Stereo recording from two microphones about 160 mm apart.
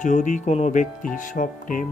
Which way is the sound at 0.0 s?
50° left (ahead or behind).